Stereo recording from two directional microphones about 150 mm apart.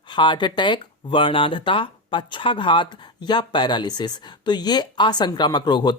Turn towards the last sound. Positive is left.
turn(degrees=30)  # may be behind; listen again after turning